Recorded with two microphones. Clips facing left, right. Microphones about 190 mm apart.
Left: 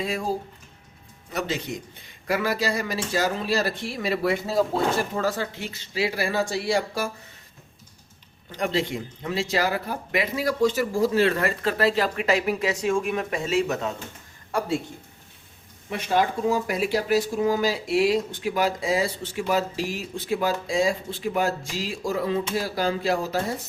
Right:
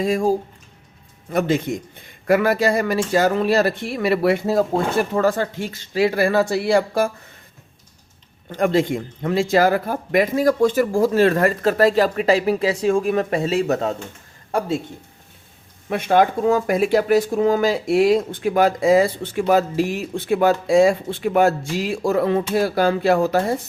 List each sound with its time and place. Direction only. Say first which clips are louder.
0.0 s speech: right 8 dB; 45° right (ahead or behind)
8.5 s speech: right 7 dB; 50° right (ahead or behind)
15.9 s speech: right 7 dB; 60° right (ahead or behind)